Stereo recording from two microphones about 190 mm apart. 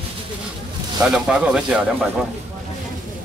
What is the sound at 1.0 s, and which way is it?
Speech, 5° right (ahead or behind).